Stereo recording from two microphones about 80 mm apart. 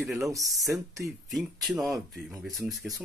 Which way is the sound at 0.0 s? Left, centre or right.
Centre.